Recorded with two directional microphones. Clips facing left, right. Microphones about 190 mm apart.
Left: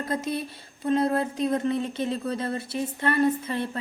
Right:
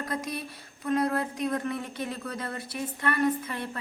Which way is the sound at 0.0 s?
25° left (ahead or behind).